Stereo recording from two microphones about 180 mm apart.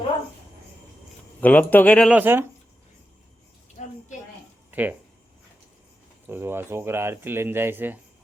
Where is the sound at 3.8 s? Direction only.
45° left (ahead or behind).